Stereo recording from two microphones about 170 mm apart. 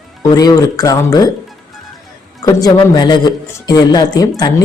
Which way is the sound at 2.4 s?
25° left (ahead or behind).